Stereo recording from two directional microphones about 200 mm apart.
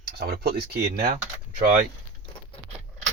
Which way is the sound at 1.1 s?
40° right (ahead or behind).